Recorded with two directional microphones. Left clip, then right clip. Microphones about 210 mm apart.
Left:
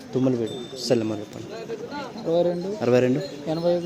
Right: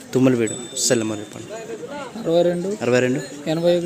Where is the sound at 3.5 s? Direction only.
50° right (ahead or behind).